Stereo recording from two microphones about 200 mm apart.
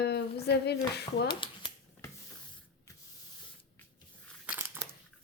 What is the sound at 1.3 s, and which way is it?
Shuffling cards, 25° left (ahead or behind).